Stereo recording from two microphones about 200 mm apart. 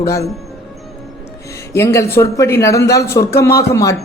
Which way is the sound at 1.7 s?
15° left (ahead or behind).